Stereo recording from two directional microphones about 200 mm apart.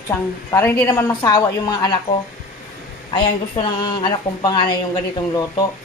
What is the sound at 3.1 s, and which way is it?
Speech, 25° left (ahead or behind).